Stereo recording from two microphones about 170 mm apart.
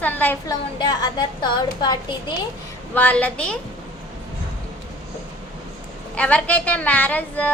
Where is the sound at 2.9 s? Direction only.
10° left (ahead or behind).